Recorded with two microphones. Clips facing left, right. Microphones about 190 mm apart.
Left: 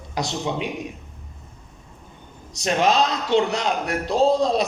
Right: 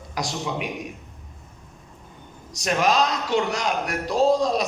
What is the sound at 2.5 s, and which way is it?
Speech, 25° left (ahead or behind).